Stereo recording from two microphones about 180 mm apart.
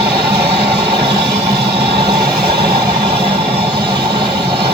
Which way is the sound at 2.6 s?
60° right (ahead or behind).